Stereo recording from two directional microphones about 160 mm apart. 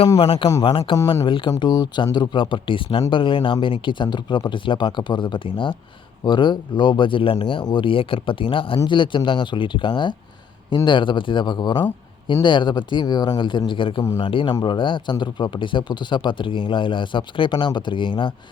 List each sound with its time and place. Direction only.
0.2 s speech: 35° left (ahead or behind)
0.4 s speech: 25° left (ahead or behind)
0.7 s speech: 35° left (ahead or behind)